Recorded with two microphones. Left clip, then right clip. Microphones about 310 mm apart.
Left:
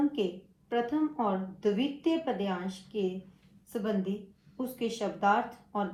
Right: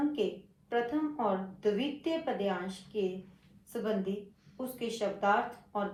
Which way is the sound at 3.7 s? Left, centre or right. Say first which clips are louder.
Left 1 dB; left.